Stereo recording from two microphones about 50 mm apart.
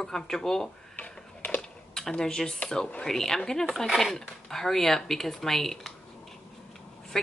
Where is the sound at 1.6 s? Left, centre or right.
Centre.